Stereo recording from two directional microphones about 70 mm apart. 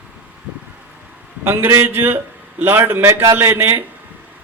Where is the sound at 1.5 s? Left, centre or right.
Right.